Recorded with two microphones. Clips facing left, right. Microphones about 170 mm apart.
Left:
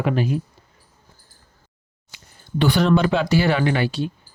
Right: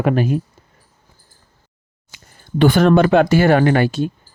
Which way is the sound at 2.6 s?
50° right (ahead or behind).